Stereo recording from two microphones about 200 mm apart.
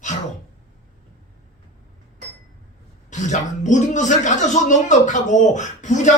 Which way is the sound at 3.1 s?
35° left (ahead or behind).